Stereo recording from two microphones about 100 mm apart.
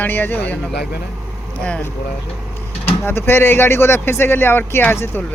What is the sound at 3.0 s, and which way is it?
Speech, 25° left (ahead or behind).